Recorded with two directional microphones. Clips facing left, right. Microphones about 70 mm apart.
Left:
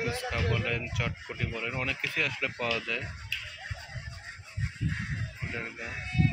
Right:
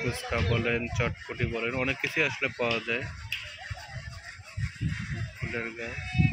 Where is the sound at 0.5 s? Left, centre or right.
Centre.